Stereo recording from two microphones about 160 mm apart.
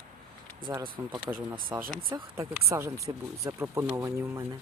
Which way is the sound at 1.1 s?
10° right (ahead or behind).